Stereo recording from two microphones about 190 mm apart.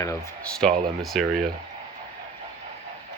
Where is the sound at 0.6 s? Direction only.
Centre (ahead or behind).